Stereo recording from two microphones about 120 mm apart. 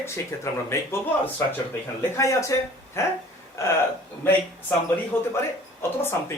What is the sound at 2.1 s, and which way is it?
Speech, 25° left (ahead or behind).